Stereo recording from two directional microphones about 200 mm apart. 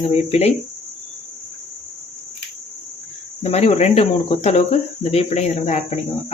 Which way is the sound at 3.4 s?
30° left (ahead or behind).